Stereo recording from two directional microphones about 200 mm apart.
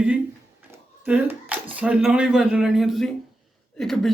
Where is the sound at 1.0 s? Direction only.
10° right (ahead or behind).